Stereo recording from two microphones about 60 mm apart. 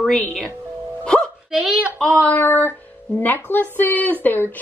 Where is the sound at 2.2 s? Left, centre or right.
Left.